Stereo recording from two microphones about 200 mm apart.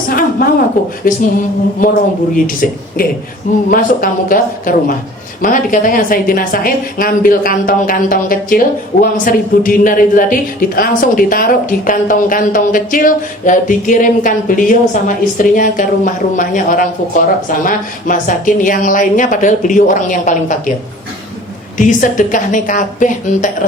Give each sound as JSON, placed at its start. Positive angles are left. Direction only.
{"t": 0.1, "sound": "a sound", "side_deg": 45}
{"t": 1.8, "sound": "a woman's voice", "side_deg": 45}
{"t": 21.8, "sound": "speech", "side_deg": 40}